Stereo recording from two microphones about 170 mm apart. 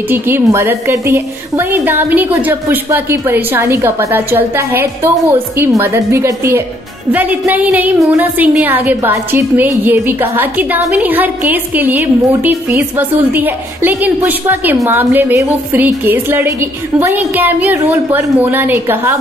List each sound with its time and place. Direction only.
0.1 s a woman's voice: 15° right (ahead or behind)